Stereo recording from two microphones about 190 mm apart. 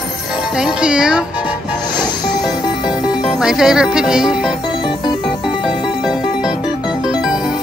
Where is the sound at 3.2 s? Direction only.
Centre (ahead or behind).